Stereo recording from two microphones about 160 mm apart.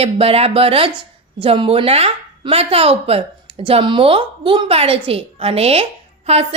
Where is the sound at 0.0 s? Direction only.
40° right (ahead or behind).